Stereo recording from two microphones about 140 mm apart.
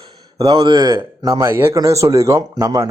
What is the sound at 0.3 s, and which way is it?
Speech, 30° right (ahead or behind).